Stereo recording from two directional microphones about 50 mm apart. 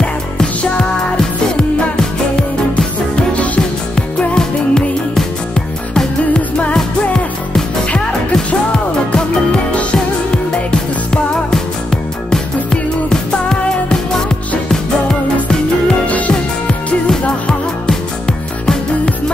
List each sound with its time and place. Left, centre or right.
0.0 s music: left
2.7 s music: left
4.4 s music: centre
7.9 s music: left
16.1 s music: left